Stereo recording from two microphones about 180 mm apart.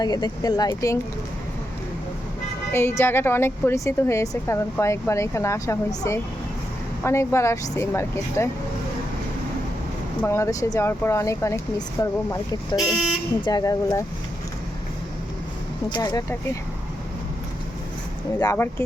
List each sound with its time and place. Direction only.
0.0 s speech: 20° left (ahead or behind)
2.7 s a woman's voice: 15° left (ahead or behind)
10.2 s a woman's voice: 15° left (ahead or behind)
15.9 s speech: 20° left (ahead or behind)